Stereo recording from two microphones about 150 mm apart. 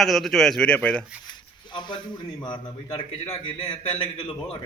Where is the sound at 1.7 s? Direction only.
30° left (ahead or behind).